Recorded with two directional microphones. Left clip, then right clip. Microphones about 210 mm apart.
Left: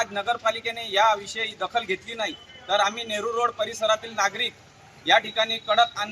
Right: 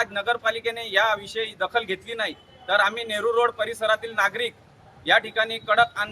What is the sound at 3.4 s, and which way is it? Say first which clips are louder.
Speech: right 2 dB; 20° right (ahead or behind).